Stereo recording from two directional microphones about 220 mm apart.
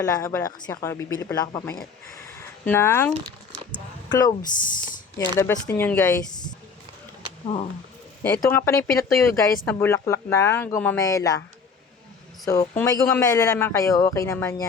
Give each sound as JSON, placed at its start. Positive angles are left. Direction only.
{"t": 0.0, "sound": "a man's voice", "side_deg": 15}
{"t": 4.1, "sound": "a man's voice", "side_deg": 20}
{"t": 5.4, "sound": "a man's voice", "side_deg": 10}
{"t": 7.4, "sound": "speech", "side_deg": 25}
{"t": 8.2, "sound": "a man's voice", "side_deg": 10}
{"t": 12.5, "sound": "a man's voice", "side_deg": 15}